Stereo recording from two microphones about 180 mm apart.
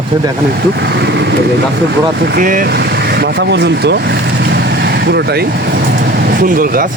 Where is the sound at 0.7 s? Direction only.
70° right (ahead or behind).